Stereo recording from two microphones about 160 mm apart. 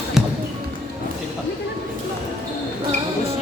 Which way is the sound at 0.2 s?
Centre (ahead or behind).